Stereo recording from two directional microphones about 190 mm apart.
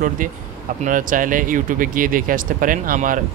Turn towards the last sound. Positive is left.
turn(degrees=-45)  # may be behind; listen again after turning